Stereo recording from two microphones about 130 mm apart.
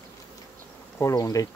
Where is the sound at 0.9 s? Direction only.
25° left (ahead or behind).